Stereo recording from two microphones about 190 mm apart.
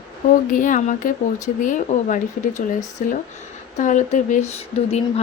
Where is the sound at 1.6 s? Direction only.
40° left (ahead or behind).